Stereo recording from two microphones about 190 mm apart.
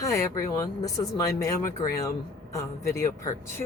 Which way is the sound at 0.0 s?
15° left (ahead or behind).